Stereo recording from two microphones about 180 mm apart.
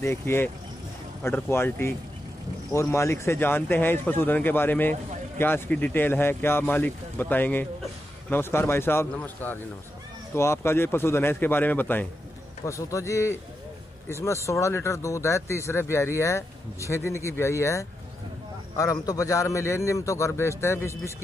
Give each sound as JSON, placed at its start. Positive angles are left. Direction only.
{"t": 0.0, "sound": "speech", "side_deg": 15}